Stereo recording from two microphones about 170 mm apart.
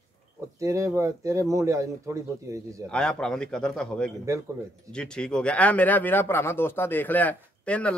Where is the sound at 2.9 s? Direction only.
5° left (ahead or behind).